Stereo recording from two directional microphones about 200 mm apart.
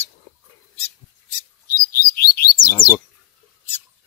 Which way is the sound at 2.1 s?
50° left (ahead or behind).